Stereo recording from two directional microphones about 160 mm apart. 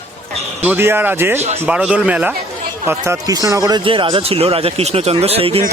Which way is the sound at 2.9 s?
20° right (ahead or behind).